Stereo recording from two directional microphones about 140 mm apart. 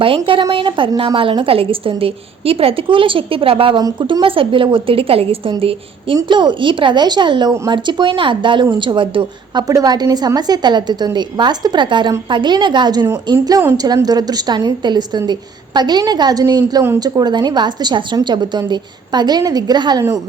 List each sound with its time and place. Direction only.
0.5 s a woman's voice: 40° right (ahead or behind)
3.8 s a woman's voice: 30° right (ahead or behind)